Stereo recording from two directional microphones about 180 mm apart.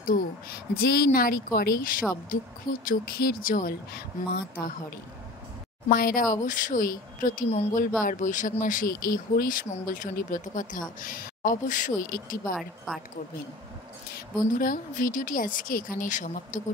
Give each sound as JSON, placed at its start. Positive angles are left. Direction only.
{"t": 0.0, "sound": "speech", "side_deg": 55}
{"t": 5.9, "sound": "speech", "side_deg": 55}
{"t": 12.5, "sound": "a woman's voice", "side_deg": 0}
{"t": 14.1, "sound": "speech", "side_deg": 50}